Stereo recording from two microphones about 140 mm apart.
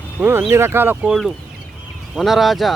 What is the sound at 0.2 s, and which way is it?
Speech, 15° right (ahead or behind).